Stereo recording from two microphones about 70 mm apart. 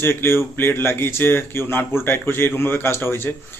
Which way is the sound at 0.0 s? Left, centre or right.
Left.